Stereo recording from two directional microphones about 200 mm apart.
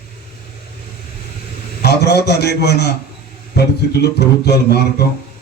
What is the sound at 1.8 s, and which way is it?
A man's voice, 55° left (ahead or behind).